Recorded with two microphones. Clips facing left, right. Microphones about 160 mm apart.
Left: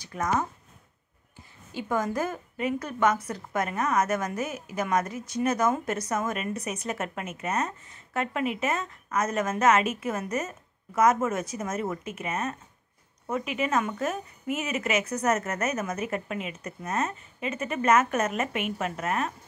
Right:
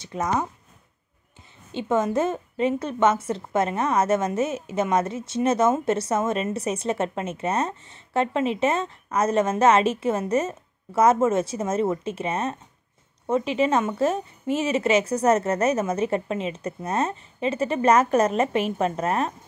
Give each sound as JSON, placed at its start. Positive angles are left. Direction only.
{"t": 0.0, "sound": "a woman's voice", "side_deg": -20}
{"t": 1.7, "sound": "a woman's voice", "side_deg": -25}